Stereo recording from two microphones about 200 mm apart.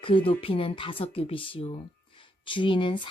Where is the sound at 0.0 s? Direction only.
25° left (ahead or behind).